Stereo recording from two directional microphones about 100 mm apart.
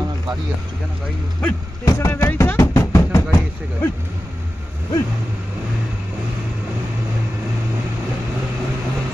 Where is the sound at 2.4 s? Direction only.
20° left (ahead or behind).